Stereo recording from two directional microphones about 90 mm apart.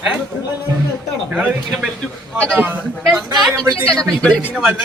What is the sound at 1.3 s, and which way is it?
Speech, 10° right (ahead or behind).